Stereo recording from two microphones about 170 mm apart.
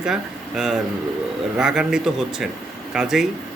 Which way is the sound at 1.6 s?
5° right (ahead or behind).